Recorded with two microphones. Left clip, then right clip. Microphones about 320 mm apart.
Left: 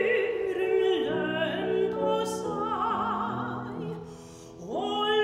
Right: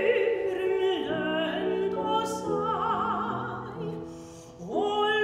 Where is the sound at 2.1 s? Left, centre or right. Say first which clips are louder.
Right 1 dB; centre.